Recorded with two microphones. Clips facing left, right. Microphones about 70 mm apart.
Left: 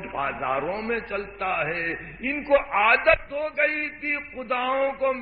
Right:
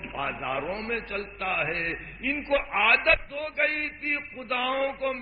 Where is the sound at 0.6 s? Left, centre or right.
Centre.